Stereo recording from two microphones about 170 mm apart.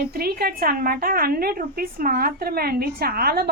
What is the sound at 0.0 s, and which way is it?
A woman's voice, 65° right (ahead or behind).